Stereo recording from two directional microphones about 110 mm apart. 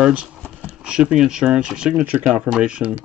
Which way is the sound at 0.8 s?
10° right (ahead or behind).